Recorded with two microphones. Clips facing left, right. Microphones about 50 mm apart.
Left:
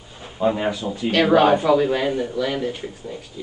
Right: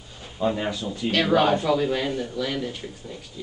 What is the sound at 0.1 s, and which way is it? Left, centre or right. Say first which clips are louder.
Speech: left 4 dB; centre.